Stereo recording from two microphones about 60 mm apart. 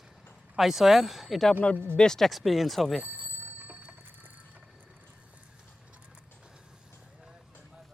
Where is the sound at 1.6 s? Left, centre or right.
Left.